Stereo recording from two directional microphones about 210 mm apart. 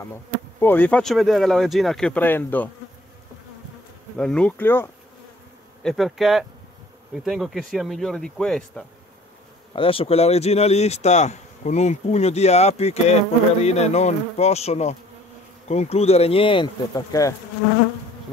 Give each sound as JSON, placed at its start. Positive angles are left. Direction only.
{"t": 0.6, "sound": "speech", "side_deg": 10}
{"t": 4.2, "sound": "speech", "side_deg": 5}
{"t": 9.8, "sound": "speech", "side_deg": 25}